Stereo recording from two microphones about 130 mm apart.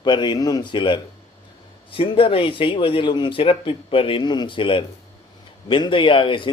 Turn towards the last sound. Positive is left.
turn(degrees=40)  # may be behind; listen again after turning